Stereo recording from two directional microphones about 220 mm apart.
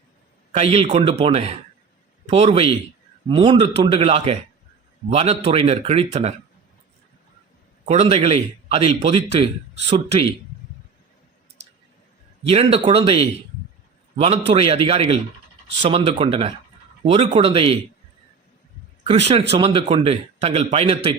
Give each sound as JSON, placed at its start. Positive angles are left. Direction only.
{"t": 0.5, "sound": "speech", "side_deg": -30}
{"t": 7.9, "sound": "speech", "side_deg": -30}
{"t": 12.5, "sound": "speech", "side_deg": -25}
{"t": 19.0, "sound": "speech", "side_deg": -25}